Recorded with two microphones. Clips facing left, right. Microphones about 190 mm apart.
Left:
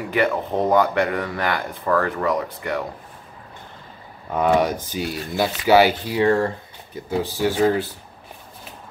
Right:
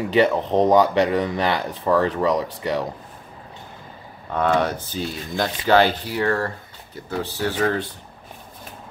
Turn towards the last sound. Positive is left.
turn(degrees=10)  # may be behind; listen again after turning